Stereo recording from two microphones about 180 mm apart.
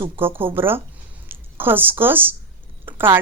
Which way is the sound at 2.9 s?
10° right (ahead or behind).